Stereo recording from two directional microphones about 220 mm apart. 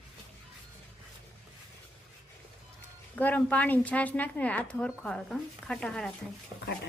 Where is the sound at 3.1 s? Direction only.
5° left (ahead or behind).